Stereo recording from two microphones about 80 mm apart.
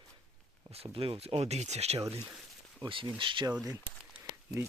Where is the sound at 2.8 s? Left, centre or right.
Right.